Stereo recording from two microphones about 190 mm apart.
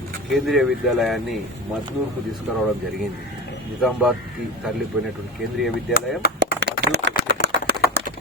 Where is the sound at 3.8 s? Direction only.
Centre (ahead or behind).